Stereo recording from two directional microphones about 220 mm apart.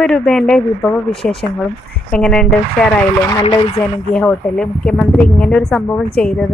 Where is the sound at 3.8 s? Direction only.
5° left (ahead or behind).